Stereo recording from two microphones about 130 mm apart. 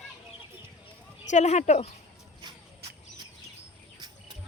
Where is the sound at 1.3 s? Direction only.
65° left (ahead or behind).